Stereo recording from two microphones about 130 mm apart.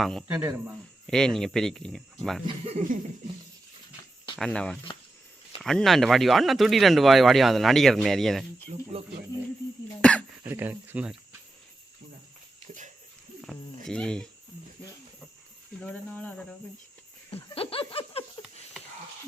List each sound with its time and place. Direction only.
0.0 s speech: 5° left (ahead or behind)
0.3 s speech: 20° right (ahead or behind)
1.0 s speech: 5° left (ahead or behind)
4.4 s cricket: 5° left (ahead or behind)
5.5 s speech: 5° left (ahead or behind)
8.7 s speech: 50° right (ahead or behind)
10.0 s dog: 10° left (ahead or behind)
10.4 s speech: 15° right (ahead or behind)
13.4 s speech: centre (ahead or behind)
15.8 s cricket: 10° left (ahead or behind)
17.3 s laughter: 45° left (ahead or behind)